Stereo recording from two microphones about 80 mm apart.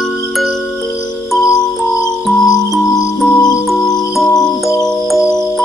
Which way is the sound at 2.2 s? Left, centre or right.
Centre.